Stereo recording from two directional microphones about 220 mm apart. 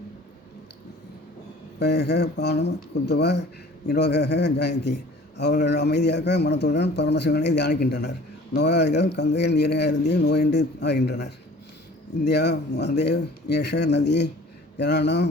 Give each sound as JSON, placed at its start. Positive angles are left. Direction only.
{"t": 1.8, "sound": "speech", "side_deg": 50}